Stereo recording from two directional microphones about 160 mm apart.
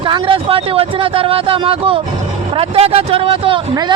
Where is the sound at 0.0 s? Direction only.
30° right (ahead or behind).